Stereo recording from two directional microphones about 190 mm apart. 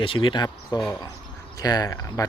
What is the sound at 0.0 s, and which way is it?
Speech, 25° left (ahead or behind).